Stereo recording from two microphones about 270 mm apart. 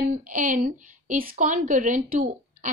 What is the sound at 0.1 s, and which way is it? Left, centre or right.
A woman's voice, right.